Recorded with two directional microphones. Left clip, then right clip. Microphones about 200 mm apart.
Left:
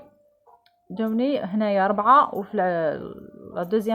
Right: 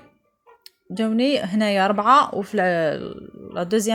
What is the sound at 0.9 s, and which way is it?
Speech, 25° right (ahead or behind).